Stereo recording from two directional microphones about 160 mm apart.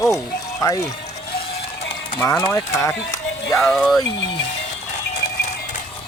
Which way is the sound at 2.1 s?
15° left (ahead or behind).